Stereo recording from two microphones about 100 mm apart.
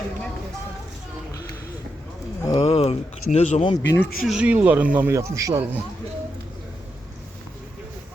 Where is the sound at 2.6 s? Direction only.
90° left.